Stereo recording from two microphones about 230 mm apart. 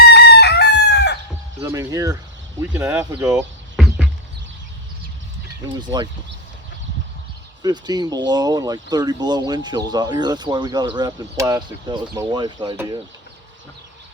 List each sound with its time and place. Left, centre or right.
0.1 s chicken: left
1.6 s speech: centre
5.8 s speech: centre
7.6 s speech: centre